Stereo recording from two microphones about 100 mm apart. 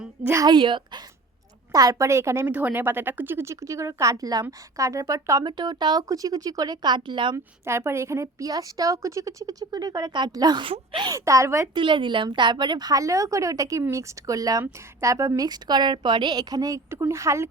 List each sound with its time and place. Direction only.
0.4 s a woman's voice: 50° right (ahead or behind)
1.7 s a woman's voice: 35° right (ahead or behind)
5.5 s a woman's voice: 45° right (ahead or behind)
7.3 s a woman's voice: 25° right (ahead or behind); by 11.2 s 50° right (ahead or behind)
11.3 s a woman's voice: 30° right (ahead or behind)
11.7 s a woman's voice: 55° right (ahead or behind); by 17.5 s 30° right (ahead or behind)